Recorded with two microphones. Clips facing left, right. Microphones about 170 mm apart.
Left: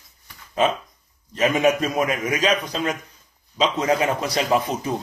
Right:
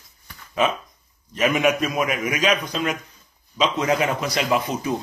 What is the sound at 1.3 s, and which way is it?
Speech, 30° left (ahead or behind).